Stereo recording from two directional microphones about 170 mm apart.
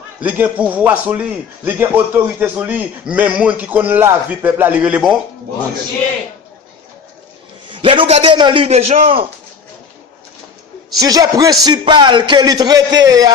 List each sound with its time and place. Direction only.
0.2 s a man's voice: 10° right (ahead or behind)
7.7 s a man's voice: 30° right (ahead or behind)
11.0 s a man's voice: 20° right (ahead or behind)